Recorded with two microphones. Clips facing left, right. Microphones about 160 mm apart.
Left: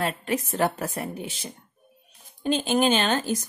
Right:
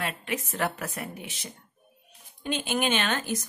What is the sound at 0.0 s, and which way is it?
Speech, 35° left (ahead or behind).